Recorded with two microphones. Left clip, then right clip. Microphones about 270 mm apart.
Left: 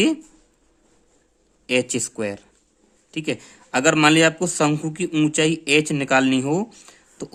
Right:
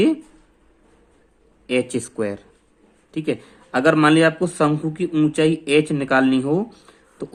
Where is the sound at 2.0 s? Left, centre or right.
Left.